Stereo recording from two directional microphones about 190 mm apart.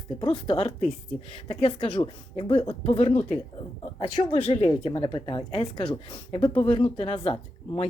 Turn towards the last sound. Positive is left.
turn(degrees=30)  # may be behind; listen again after turning